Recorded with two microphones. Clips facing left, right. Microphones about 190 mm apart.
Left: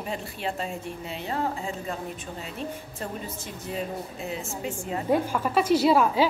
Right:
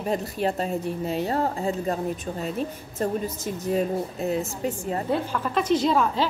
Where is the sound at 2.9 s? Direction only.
40° right (ahead or behind).